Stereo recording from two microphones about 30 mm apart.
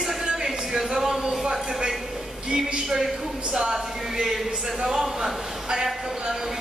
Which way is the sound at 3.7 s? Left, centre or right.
Centre.